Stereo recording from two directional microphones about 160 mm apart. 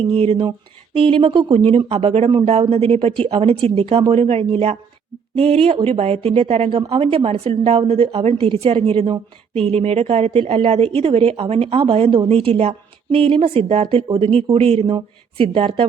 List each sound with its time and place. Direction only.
0.0 s a woman's voice: 35° right (ahead or behind)